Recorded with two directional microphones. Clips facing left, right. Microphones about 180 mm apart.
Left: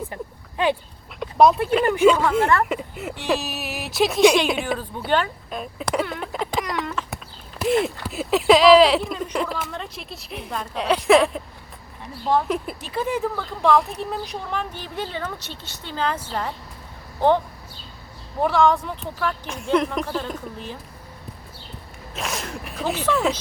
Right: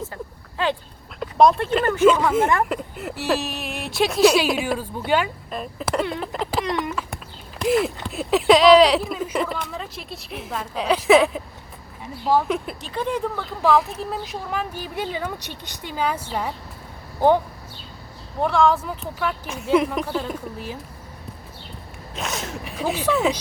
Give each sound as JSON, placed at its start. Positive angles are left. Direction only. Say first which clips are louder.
{"t": 0.0, "sound": "a sound", "louder": "left 1 dB", "side_deg": 15}
{"t": 1.2, "sound": "speech", "louder": "even", "side_deg": 0}
{"t": 1.8, "sound": "speech", "louder": "right 1 dB", "side_deg": 15}
{"t": 2.0, "sound": "speech", "louder": "right 1 dB", "side_deg": 0}
{"t": 6.1, "sound": "a sound", "louder": "right 1 dB", "side_deg": 0}
{"t": 8.0, "sound": "speech", "louder": "even", "side_deg": 0}
{"t": 18.3, "sound": "speech", "louder": "even", "side_deg": 0}
{"t": 22.1, "sound": "speech", "louder": "even", "side_deg": 0}